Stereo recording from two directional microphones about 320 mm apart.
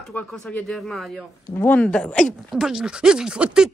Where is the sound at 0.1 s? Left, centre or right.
Centre.